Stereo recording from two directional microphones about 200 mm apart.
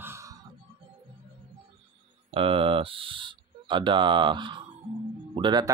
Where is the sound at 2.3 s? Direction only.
25° right (ahead or behind).